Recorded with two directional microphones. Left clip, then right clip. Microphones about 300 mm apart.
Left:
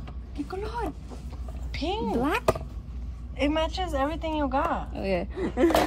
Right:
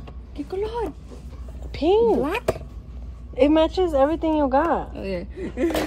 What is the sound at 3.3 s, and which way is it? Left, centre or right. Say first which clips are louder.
Speech: right 9 dB; left.